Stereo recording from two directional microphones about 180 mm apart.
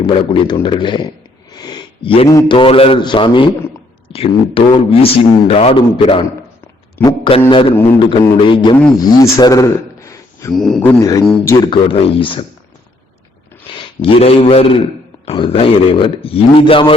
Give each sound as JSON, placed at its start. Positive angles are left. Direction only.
{"t": 0.0, "sound": "a man's voice", "side_deg": 25}
{"t": 1.5, "sound": "a sound", "side_deg": 25}
{"t": 2.3, "sound": "a man's voice", "side_deg": 15}
{"t": 2.6, "sound": "a man's voice", "side_deg": 30}
{"t": 10.5, "sound": "a man's voice", "side_deg": 0}
{"t": 11.0, "sound": "a man's voice", "side_deg": 20}
{"t": 11.7, "sound": "a man's voice", "side_deg": 30}
{"t": 13.7, "sound": "speech", "side_deg": 30}